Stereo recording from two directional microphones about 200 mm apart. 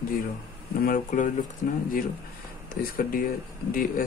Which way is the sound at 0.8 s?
40° left (ahead or behind).